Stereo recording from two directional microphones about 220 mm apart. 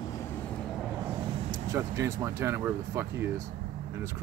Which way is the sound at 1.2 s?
25° right (ahead or behind).